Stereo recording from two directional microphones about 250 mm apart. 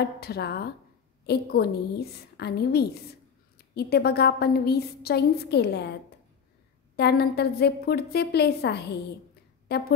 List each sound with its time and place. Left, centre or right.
0.0 s a woman's voice: left
7.0 s a woman's voice: left